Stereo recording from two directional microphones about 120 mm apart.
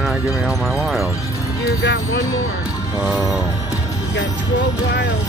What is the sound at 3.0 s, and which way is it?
Speech, 5° right (ahead or behind).